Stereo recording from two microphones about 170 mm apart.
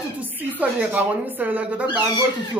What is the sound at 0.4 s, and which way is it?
Speech, 10° right (ahead or behind).